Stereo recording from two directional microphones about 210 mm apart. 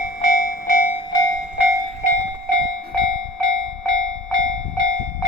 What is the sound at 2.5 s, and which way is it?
Train, 60° right (ahead or behind).